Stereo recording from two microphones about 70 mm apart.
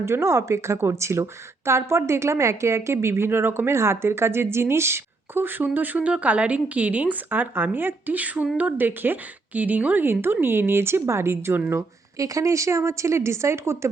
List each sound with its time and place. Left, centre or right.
0.0 s speech: right
11.8 s a woman's voice: right